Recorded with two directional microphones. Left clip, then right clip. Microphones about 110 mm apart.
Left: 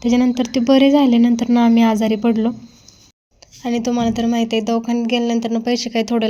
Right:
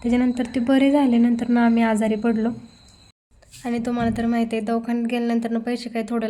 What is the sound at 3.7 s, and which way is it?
Speech, 30° left (ahead or behind).